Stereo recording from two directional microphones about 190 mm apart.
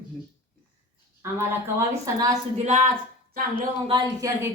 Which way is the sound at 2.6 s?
40° right (ahead or behind).